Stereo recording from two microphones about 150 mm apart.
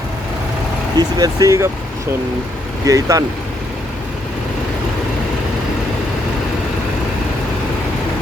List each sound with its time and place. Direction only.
0.9 s speech: 25° right (ahead or behind)
2.8 s speech: 20° right (ahead or behind)